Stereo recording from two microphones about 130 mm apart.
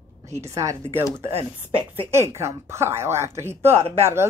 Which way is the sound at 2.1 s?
20° right (ahead or behind).